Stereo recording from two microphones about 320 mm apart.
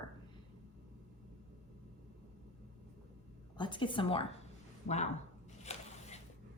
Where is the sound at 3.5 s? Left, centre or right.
Centre.